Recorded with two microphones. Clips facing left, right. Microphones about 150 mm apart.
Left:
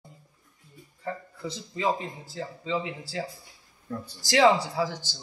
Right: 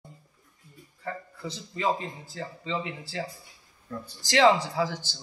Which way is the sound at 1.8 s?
10° left (ahead or behind).